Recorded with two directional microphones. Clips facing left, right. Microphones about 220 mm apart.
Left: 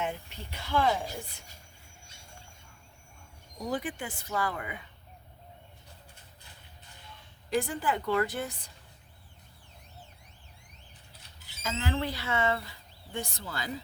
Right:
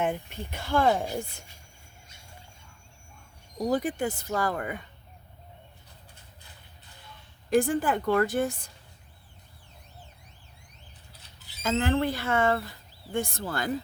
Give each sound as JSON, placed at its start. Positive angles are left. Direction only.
{"t": 0.0, "sound": "a woman's voice", "side_deg": -50}
{"t": 3.6, "sound": "speech", "side_deg": -40}
{"t": 7.5, "sound": "a woman's voice", "side_deg": -50}
{"t": 11.6, "sound": "a woman's voice", "side_deg": -50}